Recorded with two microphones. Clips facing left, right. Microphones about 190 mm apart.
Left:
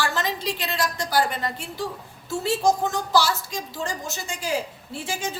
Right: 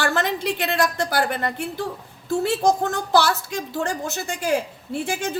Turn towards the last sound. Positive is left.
turn(degrees=-60)  # may be behind; listen again after turning